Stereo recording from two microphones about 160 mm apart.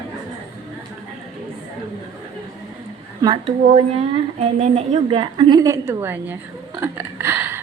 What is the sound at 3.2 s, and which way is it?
A woman's voice, 35° right (ahead or behind).